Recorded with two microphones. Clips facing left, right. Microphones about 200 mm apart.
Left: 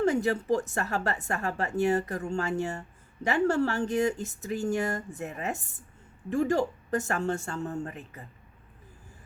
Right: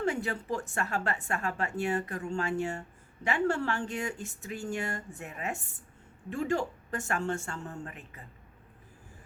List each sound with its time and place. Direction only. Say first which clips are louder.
0.0 s a woman's voice: left 6 dB; 40° left (ahead or behind)